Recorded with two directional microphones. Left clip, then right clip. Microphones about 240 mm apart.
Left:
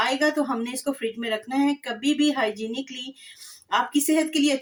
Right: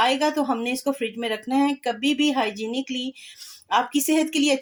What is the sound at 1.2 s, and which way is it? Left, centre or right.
Speech, right.